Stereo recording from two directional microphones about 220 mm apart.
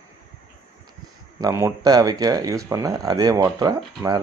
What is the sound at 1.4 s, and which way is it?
Speech, 15° right (ahead or behind).